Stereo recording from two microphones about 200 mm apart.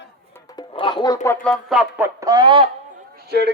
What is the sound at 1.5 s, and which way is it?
Speech, 5° right (ahead or behind).